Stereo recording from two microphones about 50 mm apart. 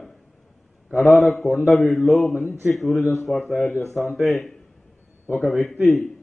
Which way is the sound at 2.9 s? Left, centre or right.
Left.